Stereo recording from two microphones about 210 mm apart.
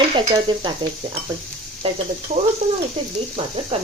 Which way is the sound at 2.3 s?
30° right (ahead or behind).